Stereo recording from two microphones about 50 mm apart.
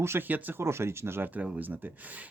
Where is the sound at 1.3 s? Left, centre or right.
Right.